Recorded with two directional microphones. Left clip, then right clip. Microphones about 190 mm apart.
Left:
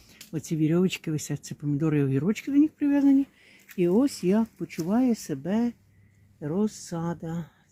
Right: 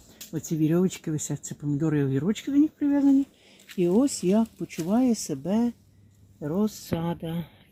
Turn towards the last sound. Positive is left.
turn(degrees=-10)  # may be behind; listen again after turning